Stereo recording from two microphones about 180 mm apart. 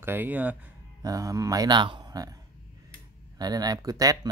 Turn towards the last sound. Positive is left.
turn(degrees=-20)  # may be behind; listen again after turning